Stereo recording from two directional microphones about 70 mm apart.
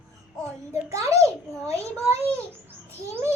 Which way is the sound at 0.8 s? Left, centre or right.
Right.